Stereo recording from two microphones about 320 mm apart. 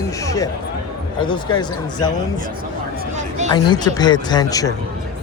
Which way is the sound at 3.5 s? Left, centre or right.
Centre.